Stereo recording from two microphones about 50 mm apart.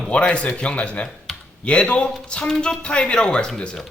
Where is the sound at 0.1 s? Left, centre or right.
Left.